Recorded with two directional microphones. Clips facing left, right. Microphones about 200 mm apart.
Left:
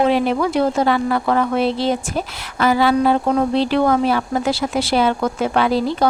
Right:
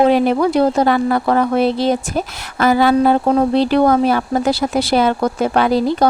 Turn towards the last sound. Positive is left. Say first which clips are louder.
# right 3 dB
turn(degrees=-45)  # may be behind; listen again after turning